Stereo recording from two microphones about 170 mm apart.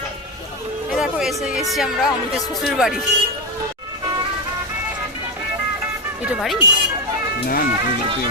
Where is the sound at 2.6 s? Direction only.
Centre (ahead or behind).